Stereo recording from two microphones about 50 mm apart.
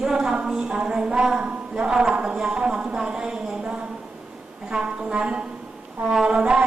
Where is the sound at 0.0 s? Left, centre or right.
Centre.